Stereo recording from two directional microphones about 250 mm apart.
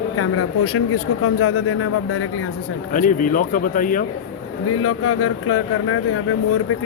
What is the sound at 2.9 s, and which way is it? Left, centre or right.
Speech, left.